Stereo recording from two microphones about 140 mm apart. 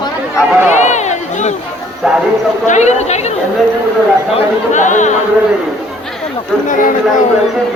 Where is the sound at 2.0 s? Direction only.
5° right (ahead or behind).